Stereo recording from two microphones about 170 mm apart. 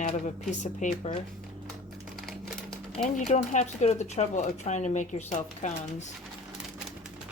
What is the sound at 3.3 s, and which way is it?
Speech, 40° left (ahead or behind).